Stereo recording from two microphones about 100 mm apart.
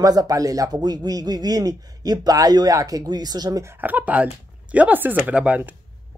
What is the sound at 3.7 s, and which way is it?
Speech, 20° right (ahead or behind).